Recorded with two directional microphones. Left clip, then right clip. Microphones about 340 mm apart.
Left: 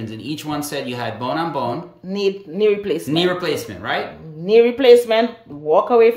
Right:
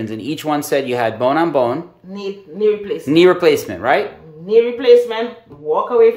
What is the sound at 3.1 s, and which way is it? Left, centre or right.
Speech, centre.